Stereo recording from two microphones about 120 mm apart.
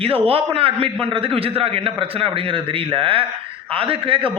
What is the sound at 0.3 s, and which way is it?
A man's voice, 55° right (ahead or behind).